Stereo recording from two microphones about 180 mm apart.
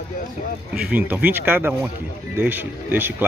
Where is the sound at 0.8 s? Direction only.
10° right (ahead or behind).